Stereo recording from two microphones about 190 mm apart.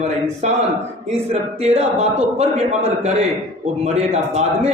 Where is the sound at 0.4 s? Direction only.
35° right (ahead or behind).